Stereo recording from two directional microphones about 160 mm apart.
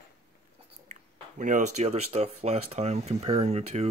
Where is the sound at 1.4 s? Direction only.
50° right (ahead or behind).